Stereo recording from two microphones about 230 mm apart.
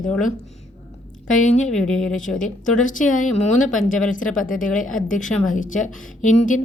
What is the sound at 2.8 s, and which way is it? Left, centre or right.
Speech, left.